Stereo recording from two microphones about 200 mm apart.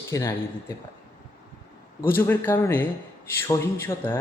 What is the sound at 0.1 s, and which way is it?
Speech, 15° left (ahead or behind).